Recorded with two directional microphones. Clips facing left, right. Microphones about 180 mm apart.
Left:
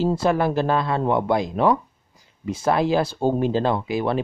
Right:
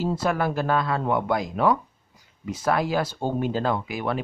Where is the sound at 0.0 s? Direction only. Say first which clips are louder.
Left 4 dB; 25° left (ahead or behind).